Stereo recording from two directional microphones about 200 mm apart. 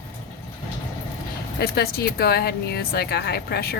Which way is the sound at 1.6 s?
50° left (ahead or behind).